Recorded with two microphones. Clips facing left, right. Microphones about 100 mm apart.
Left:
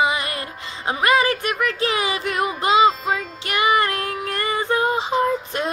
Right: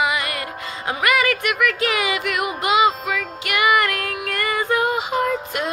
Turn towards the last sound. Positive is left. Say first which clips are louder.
# left 1 dB
turn(degrees=30)  # may be behind; listen again after turning